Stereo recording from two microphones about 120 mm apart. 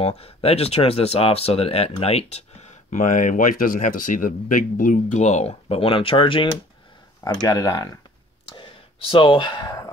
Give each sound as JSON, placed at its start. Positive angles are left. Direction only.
{"t": 0.0, "sound": "speech", "side_deg": 55}
{"t": 7.2, "sound": "speech", "side_deg": 30}
{"t": 8.5, "sound": "a sound", "side_deg": 45}